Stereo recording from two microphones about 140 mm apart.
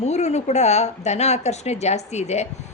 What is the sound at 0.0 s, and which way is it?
A woman's voice, 55° left (ahead or behind).